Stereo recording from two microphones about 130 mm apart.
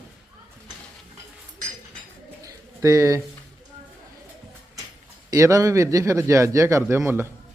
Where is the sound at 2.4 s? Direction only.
25° right (ahead or behind).